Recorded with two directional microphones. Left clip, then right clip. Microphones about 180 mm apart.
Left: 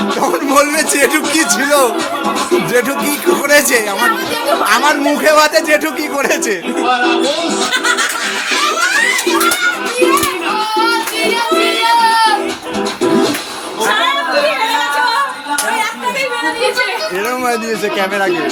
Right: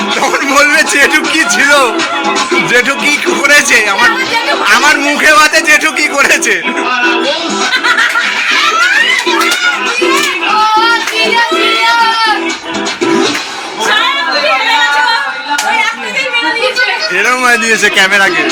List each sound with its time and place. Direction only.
0.6 s a man's voice: 15° left (ahead or behind)
17.2 s a man's voice: centre (ahead or behind)